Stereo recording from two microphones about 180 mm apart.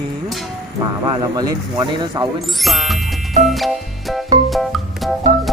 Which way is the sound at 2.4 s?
Centre (ahead or behind).